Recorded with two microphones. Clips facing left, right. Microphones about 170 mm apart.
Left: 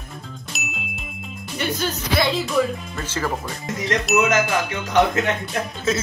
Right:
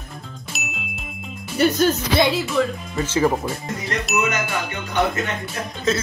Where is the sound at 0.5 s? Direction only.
Centre (ahead or behind).